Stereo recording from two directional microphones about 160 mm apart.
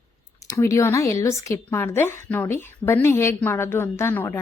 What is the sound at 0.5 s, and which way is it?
A woman's voice, 15° left (ahead or behind).